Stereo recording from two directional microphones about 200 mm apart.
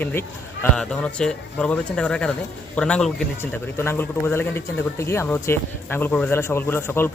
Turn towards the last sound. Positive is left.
turn(degrees=10)  # may be behind; listen again after turning